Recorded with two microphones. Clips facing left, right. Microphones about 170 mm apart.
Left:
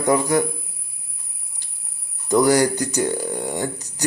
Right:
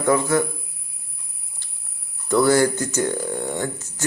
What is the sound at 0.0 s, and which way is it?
Speech, 15° left (ahead or behind).